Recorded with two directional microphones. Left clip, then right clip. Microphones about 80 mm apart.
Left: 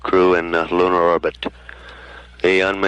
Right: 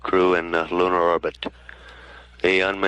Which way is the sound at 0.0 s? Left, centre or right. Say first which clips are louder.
Left 4 dB; right.